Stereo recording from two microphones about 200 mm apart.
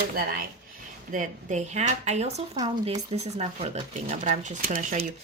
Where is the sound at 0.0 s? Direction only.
50° right (ahead or behind).